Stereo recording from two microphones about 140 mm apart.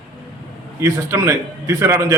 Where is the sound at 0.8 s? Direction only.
20° right (ahead or behind).